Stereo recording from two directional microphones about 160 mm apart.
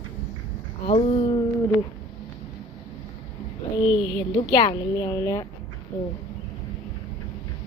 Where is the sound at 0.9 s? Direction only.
40° left (ahead or behind).